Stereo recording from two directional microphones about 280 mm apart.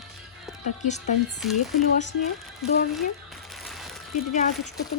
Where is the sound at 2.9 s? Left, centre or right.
Centre.